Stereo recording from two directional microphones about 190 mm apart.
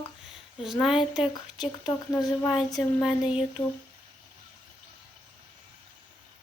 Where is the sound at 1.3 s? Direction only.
20° left (ahead or behind).